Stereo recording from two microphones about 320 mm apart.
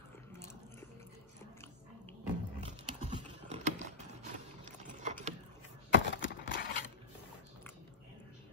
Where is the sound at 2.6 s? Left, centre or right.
Centre.